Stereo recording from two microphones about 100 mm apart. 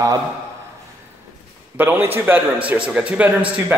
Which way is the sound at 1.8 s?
20° right (ahead or behind).